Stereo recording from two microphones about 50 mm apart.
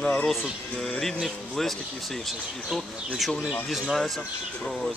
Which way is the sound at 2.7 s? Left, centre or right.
Centre.